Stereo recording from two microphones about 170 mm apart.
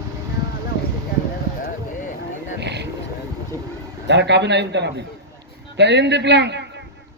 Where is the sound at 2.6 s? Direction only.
85° right.